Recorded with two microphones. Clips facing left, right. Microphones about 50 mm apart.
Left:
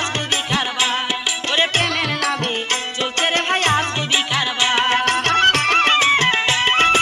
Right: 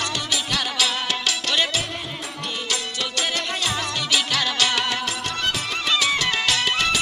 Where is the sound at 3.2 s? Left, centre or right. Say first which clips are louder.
Left 8 dB; left.